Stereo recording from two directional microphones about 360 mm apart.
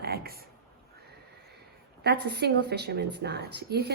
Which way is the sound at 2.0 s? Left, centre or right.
Right.